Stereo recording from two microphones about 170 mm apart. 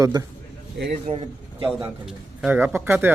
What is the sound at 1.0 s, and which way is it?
Speech, 35° right (ahead or behind).